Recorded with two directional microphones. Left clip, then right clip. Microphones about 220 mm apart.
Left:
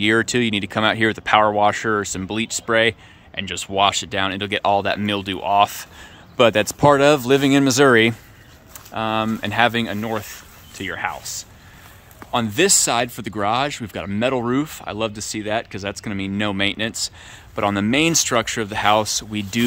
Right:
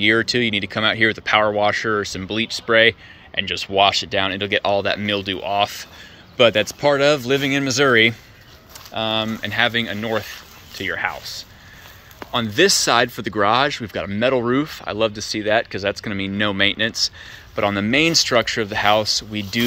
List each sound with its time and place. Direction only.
0.0 s speech: 15° left (ahead or behind)